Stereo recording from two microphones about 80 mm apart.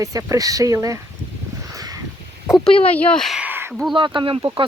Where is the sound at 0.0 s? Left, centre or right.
Right.